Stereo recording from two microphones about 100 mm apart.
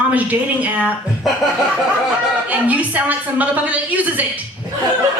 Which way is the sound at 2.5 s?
15° right (ahead or behind).